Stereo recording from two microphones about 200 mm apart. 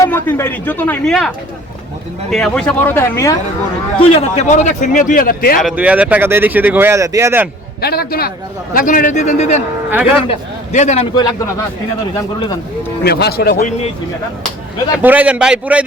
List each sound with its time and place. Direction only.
0.0 s speech: 10° left (ahead or behind)
2.3 s speech: 5° left (ahead or behind)
4.1 s a man's voice: 35° left (ahead or behind)
5.5 s speech: 5° right (ahead or behind)
7.8 s a man's voice: 50° left (ahead or behind)
9.9 s speech: 5° right (ahead or behind)
10.2 s a man's voice: 35° left (ahead or behind)
13.1 s speech: 55° left (ahead or behind)
13.6 s a man's voice: 35° left (ahead or behind)
14.9 s speech: 10° right (ahead or behind)